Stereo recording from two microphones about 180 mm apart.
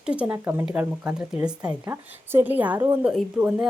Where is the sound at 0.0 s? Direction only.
5° right (ahead or behind).